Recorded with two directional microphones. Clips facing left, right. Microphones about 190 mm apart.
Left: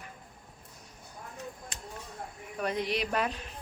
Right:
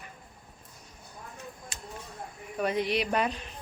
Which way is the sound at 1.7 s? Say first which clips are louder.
Right 1 dB; 10° right (ahead or behind).